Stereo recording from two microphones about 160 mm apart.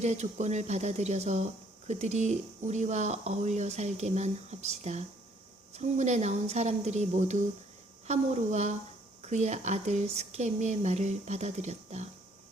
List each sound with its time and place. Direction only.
0.0 s speech: 45° right (ahead or behind)